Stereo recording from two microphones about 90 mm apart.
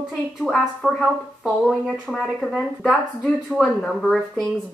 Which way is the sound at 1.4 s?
5° right (ahead or behind).